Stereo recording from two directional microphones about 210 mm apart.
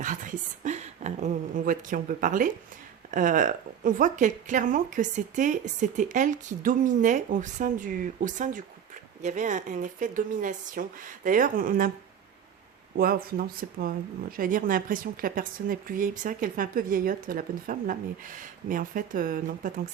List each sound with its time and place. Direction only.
0.0 s a woman's voice: 35° right (ahead or behind)
13.0 s speech: 45° right (ahead or behind)